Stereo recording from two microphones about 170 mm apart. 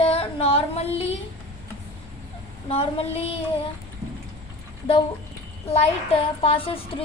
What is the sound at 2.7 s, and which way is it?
Speech, 35° left (ahead or behind).